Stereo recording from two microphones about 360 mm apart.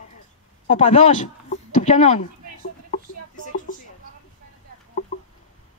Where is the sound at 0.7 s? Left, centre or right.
Centre.